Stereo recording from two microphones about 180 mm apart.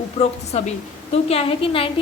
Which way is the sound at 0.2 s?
35° left (ahead or behind).